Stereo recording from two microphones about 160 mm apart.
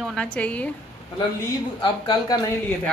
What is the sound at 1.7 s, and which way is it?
Speech, 25° left (ahead or behind).